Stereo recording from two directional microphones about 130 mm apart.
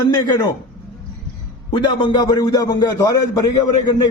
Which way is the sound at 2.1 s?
30° left (ahead or behind).